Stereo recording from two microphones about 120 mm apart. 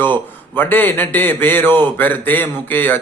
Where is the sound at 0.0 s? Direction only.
15° left (ahead or behind).